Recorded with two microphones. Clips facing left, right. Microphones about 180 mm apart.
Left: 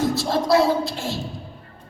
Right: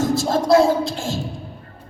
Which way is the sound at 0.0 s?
45° right (ahead or behind).